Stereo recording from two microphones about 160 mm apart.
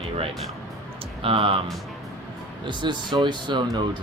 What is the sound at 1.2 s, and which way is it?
Speech, 35° right (ahead or behind).